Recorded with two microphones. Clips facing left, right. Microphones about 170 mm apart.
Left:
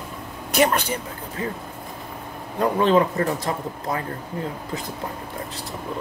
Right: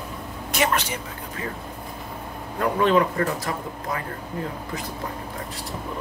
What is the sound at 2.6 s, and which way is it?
Speech, 25° left (ahead or behind).